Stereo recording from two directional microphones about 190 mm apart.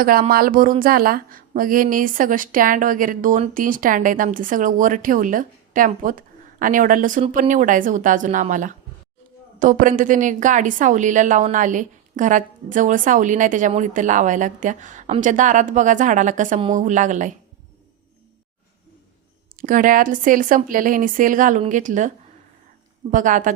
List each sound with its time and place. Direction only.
0.0 s a woman's voice: 50° right (ahead or behind)
19.5 s a woman's voice: 45° right (ahead or behind)
23.1 s speech: 45° right (ahead or behind)